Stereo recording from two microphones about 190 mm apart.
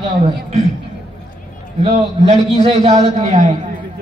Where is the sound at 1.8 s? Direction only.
35° right (ahead or behind).